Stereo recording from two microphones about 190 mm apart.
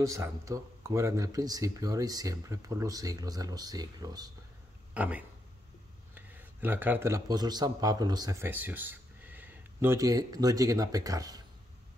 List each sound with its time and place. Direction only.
0.0 s speech: 15° right (ahead or behind)
4.9 s a man's voice: 10° right (ahead or behind)